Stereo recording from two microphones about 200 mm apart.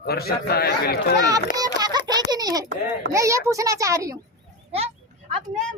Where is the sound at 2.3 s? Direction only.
20° right (ahead or behind).